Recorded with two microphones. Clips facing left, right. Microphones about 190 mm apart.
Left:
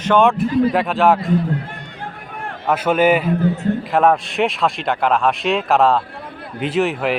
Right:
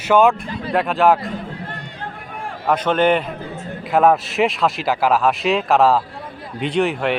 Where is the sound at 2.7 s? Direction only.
10° left (ahead or behind).